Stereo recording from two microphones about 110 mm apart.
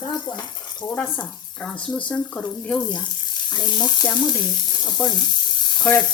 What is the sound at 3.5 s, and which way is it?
Speech, 40° left (ahead or behind).